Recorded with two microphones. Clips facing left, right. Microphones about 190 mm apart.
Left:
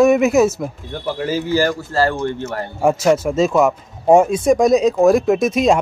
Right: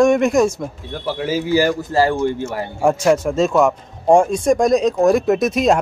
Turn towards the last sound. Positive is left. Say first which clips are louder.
# left 1 dB
turn(degrees=0)  # may be behind; listen again after turning